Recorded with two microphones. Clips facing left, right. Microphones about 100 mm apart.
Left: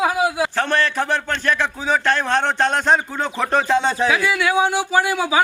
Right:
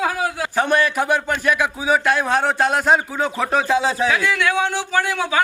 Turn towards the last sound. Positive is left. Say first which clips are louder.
# left 2 dB
turn(degrees=10)  # may be behind; listen again after turning